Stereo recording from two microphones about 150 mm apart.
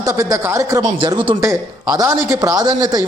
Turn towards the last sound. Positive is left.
turn(degrees=-30)  # may be behind; listen again after turning